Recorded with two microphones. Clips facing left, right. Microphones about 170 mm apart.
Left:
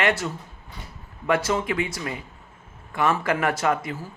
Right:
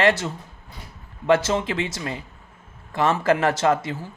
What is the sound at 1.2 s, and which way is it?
Speech, 25° right (ahead or behind).